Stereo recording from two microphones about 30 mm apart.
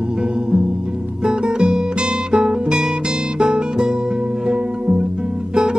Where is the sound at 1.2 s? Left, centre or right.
Right.